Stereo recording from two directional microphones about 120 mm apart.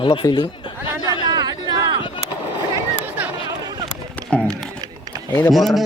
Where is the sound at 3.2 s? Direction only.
15° right (ahead or behind).